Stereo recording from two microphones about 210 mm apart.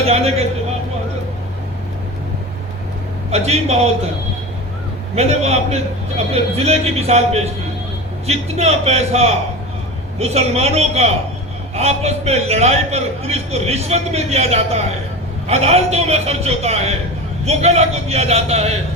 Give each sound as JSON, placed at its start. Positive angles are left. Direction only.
{"t": 0.1, "sound": "a man's voice", "side_deg": -30}
{"t": 3.2, "sound": "a man's voice", "side_deg": -30}
{"t": 5.1, "sound": "a man's voice", "side_deg": -30}